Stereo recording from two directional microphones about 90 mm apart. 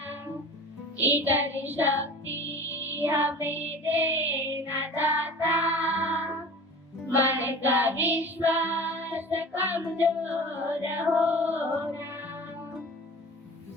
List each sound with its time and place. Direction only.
0.9 s music: 20° right (ahead or behind)
2.2 s music: 35° left (ahead or behind)
2.8 s music: 20° right (ahead or behind)